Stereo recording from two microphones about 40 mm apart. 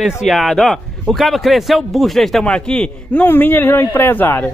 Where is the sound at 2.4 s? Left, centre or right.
Left.